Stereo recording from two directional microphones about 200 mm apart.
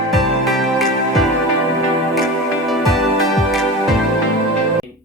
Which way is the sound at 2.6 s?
Centre (ahead or behind).